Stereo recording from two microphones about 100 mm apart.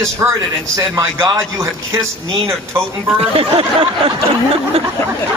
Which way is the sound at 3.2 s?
70° right (ahead or behind).